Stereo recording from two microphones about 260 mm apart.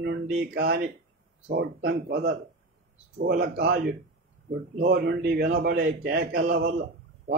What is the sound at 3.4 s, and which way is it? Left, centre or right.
Speech, right.